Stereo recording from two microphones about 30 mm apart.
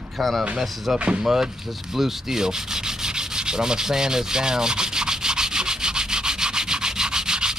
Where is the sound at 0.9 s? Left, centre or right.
Right.